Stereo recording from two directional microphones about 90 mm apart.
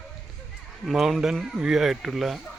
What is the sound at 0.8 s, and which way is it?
Speech, centre (ahead or behind).